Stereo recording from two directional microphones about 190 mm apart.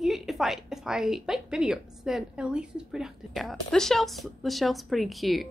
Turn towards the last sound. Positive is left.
turn(degrees=0)  # may be behind; listen again after turning